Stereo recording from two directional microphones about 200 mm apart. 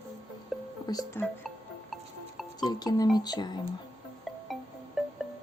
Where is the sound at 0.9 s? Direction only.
15° left (ahead or behind).